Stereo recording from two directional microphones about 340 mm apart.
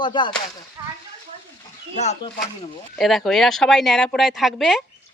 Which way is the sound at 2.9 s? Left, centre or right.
Centre.